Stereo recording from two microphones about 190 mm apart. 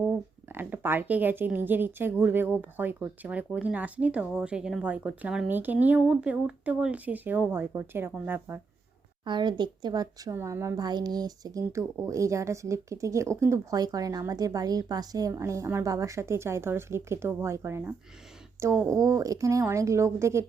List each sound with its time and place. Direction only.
0.0 s speech: 10° right (ahead or behind)
9.2 s a woman's voice: 25° right (ahead or behind)